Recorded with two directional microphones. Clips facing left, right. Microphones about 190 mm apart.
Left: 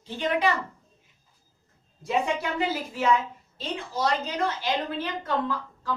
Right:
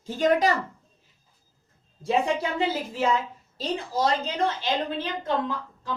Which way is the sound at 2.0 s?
30° right (ahead or behind).